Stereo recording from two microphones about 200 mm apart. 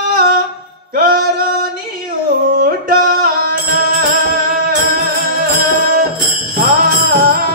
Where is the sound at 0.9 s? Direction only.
45° right (ahead or behind).